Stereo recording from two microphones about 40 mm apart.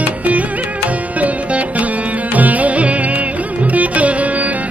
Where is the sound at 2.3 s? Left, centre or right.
Right.